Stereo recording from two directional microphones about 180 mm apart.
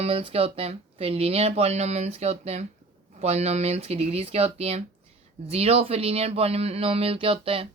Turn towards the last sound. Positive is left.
turn(degrees=-30)  # may be behind; listen again after turning